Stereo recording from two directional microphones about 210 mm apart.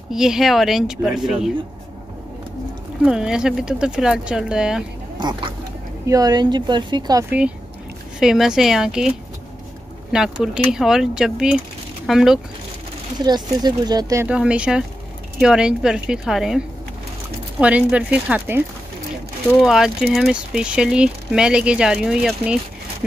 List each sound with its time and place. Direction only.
0.1 s speech: centre (ahead or behind)
3.0 s speech: 5° right (ahead or behind)
5.1 s speech: 20° right (ahead or behind); by 9.1 s 5° right (ahead or behind)
10.1 s speech: 5° right (ahead or behind)
13.2 s speech: 20° right (ahead or behind)
14.2 s speech: 5° right (ahead or behind)
19.6 s speech: centre (ahead or behind)